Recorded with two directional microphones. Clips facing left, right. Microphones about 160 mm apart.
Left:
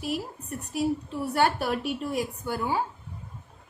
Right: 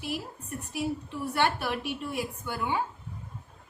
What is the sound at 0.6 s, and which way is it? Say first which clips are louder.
A woman's voice: left 5 dB; 40° left (ahead or behind).